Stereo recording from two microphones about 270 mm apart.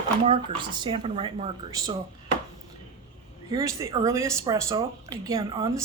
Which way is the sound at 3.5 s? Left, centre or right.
Centre.